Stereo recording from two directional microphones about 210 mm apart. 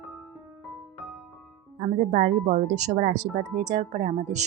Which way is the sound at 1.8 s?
35° right (ahead or behind).